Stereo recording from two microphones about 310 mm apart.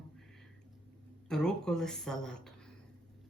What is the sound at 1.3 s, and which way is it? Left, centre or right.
Speech, centre.